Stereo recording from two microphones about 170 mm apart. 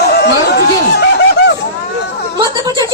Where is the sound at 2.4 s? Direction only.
25° right (ahead or behind).